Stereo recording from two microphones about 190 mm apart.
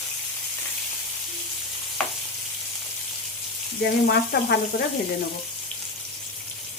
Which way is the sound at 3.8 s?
55° left (ahead or behind).